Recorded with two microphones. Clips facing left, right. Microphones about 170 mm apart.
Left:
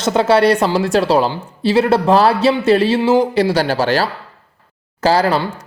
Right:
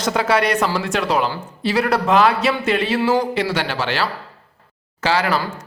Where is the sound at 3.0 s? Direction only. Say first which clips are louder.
Left 5 dB; 20° left (ahead or behind).